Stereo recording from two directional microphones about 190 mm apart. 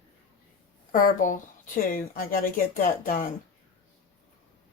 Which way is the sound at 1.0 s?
45° left (ahead or behind).